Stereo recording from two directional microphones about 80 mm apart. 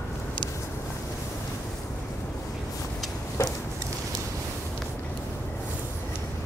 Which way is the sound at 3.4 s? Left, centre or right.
Left.